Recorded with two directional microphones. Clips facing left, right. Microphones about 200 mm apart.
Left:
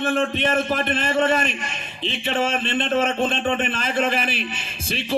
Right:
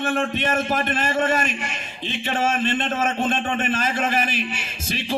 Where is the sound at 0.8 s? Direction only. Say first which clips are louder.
Left 2 dB; 45° right (ahead or behind).